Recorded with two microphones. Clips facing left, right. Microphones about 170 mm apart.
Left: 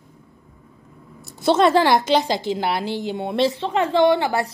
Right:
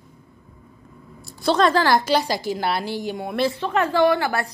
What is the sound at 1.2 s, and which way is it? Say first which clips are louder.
A woman's voice: left 2 dB; 20° left (ahead or behind).